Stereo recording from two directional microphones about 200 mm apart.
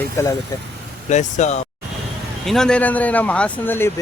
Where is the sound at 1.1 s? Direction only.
35° left (ahead or behind).